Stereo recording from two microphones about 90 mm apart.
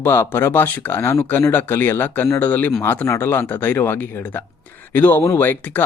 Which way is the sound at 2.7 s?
30° left (ahead or behind).